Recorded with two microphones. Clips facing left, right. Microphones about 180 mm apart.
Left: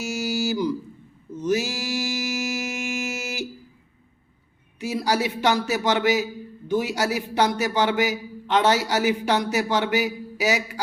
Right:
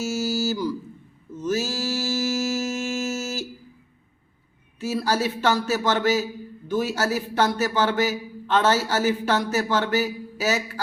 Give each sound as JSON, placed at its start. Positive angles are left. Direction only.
{"t": 0.0, "sound": "a sound", "side_deg": 15}
{"t": 1.4, "sound": "mantra", "side_deg": 15}
{"t": 4.8, "sound": "a man's voice", "side_deg": 15}